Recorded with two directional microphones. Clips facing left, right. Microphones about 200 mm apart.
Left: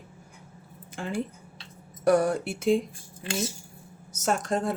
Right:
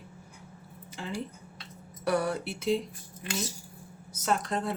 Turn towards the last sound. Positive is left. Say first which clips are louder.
# left 3 dB
turn(degrees=45)  # may be behind; listen again after turning